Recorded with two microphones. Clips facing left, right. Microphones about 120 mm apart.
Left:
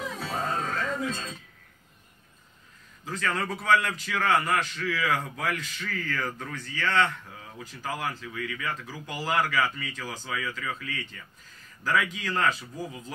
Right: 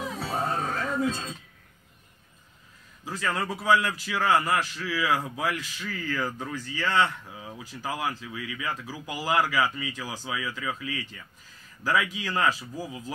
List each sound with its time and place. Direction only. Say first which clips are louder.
0.1 s music: right 2 dB; 30° right (ahead or behind)
0.4 s sheep: right 1 dB; 20° right (ahead or behind)
3.1 s a man's voice: even; 5° right (ahead or behind)